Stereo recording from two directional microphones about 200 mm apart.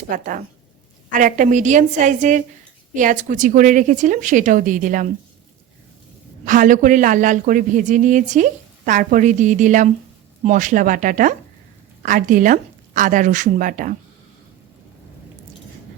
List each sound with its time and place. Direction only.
0.1 s speech: 40° right (ahead or behind)
6.4 s speech: 40° right (ahead or behind)